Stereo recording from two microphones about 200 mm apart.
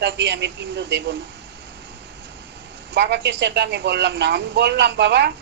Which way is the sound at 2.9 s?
60° right (ahead or behind).